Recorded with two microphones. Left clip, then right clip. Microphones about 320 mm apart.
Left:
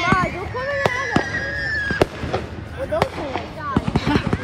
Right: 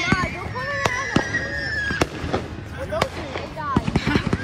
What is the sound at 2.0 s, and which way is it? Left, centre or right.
Fireworks, left.